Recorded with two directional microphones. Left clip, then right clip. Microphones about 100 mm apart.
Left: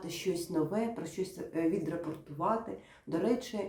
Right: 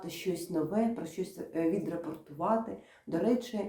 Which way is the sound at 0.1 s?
15° left (ahead or behind).